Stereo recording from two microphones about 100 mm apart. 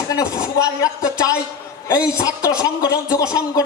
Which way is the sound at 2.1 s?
35° left (ahead or behind).